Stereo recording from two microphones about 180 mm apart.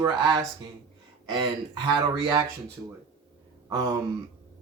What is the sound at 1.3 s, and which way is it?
Speech, 25° right (ahead or behind).